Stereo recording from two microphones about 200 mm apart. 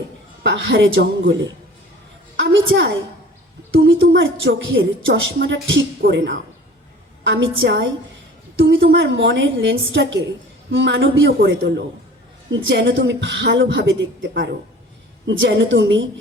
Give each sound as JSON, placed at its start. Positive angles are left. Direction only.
{"t": 0.5, "sound": "a woman's voice", "side_deg": -70}